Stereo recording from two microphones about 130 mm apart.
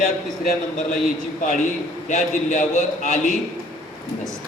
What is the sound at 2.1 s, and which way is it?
A man's voice, 65° left (ahead or behind).